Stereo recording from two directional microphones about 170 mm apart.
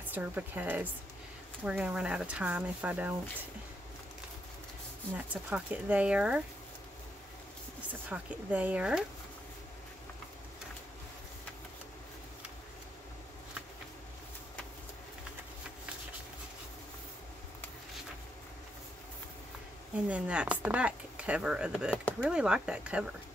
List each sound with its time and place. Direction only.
0.0 s speech: 10° right (ahead or behind)
5.1 s speech: 10° right (ahead or behind)
8.1 s speech: 10° right (ahead or behind)
20.1 s speech: 5° right (ahead or behind)